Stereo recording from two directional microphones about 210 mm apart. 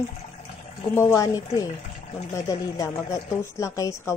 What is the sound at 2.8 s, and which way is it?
A woman's voice, 15° left (ahead or behind).